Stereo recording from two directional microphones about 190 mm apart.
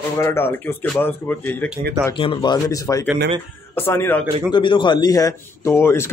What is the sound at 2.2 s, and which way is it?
A man's voice, 25° left (ahead or behind).